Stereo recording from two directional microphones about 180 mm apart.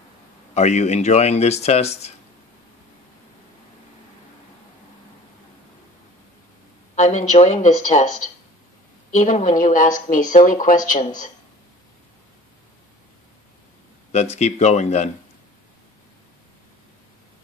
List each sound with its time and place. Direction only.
0.6 s speech: 40° left (ahead or behind)
7.0 s speech: 40° left (ahead or behind)
9.1 s a woman's voice: 45° left (ahead or behind)
14.3 s speech: 40° left (ahead or behind)